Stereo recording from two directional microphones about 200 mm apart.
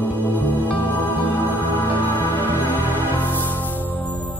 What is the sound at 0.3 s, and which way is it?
Music, 10° left (ahead or behind).